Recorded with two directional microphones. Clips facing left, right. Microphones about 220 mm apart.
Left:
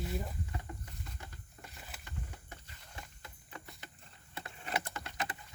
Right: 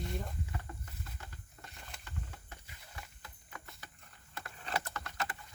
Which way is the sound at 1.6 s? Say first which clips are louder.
Left 1 dB; 5° left (ahead or behind).